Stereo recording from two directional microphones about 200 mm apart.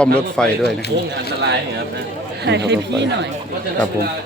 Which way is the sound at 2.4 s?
60° right (ahead or behind).